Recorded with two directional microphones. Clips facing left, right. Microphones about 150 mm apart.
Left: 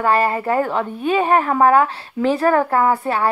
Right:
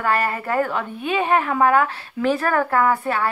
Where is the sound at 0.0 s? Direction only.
30° left (ahead or behind).